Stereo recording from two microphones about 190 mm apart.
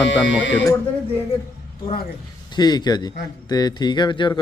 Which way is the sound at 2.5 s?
20° left (ahead or behind).